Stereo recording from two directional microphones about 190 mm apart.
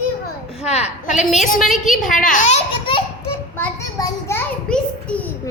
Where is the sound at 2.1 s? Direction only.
45° left (ahead or behind).